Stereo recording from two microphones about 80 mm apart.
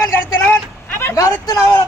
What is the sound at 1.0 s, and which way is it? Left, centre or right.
Speech, left.